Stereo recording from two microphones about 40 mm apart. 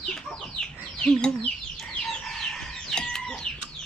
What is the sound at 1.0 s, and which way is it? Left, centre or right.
Speech, left.